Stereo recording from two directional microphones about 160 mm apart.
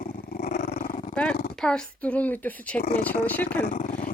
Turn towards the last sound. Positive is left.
turn(degrees=55)  # may be behind; listen again after turning